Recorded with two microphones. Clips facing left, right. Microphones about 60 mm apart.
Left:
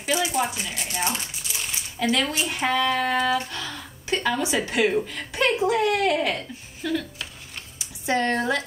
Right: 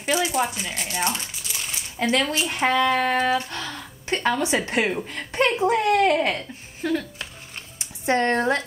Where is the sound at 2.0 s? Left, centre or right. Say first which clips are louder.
Right 1 dB; right.